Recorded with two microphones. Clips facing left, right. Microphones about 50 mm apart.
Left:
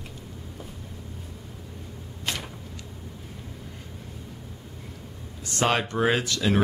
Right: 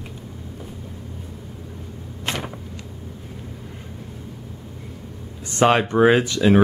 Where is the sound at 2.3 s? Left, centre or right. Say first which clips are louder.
Right 5 dB; right.